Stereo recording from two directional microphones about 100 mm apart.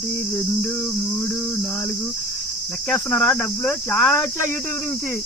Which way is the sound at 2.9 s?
15° left (ahead or behind).